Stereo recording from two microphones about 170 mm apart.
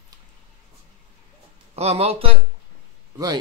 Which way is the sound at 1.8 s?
40° right (ahead or behind).